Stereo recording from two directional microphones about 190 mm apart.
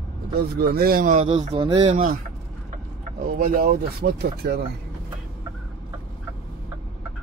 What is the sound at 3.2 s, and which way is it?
Speech, 50° right (ahead or behind).